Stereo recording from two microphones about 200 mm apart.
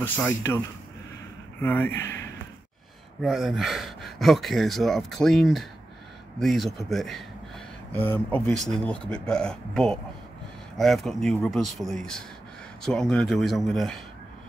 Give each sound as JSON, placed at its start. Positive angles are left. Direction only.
{"t": 0.0, "sound": "speech", "side_deg": 10}
{"t": 1.6, "sound": "speech", "side_deg": 10}
{"t": 3.2, "sound": "speech", "side_deg": 0}